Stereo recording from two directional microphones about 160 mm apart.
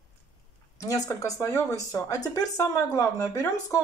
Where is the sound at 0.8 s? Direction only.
20° left (ahead or behind).